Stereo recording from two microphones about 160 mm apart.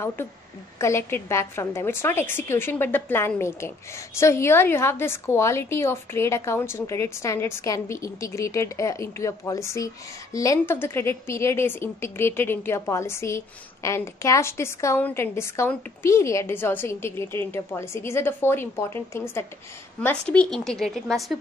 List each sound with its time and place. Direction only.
0.7 s a woman's voice: 15° left (ahead or behind); by 21.4 s centre (ahead or behind)